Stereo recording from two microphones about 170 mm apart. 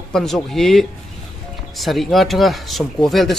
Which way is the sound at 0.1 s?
Centre (ahead or behind).